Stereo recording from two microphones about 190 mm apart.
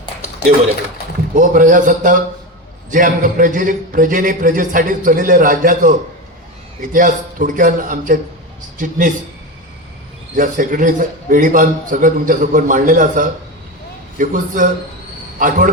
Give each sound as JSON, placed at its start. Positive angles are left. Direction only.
{"t": 1.4, "sound": "a man's voice", "side_deg": -45}
{"t": 6.9, "sound": "a man's voice", "side_deg": -45}
{"t": 10.3, "sound": "a man's voice", "side_deg": -45}